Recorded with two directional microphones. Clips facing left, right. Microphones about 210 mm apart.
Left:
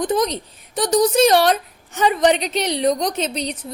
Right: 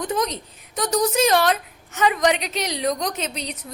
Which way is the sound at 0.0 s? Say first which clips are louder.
Left 5 dB; 35° left (ahead or behind).